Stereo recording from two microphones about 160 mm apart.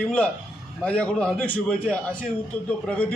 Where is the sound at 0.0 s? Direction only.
5° left (ahead or behind).